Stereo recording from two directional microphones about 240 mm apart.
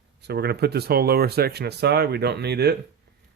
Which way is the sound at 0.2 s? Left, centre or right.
Right.